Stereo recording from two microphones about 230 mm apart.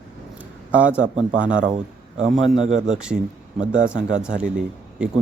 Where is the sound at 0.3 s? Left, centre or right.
Centre.